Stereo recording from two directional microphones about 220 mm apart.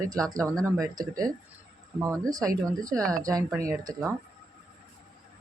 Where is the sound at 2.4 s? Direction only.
15° right (ahead or behind).